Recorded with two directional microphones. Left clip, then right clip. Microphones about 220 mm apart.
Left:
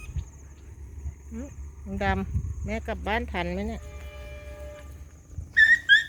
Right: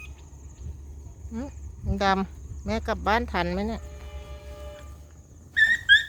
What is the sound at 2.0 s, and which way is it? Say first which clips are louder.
Speech: right 5 dB; 20° right (ahead or behind).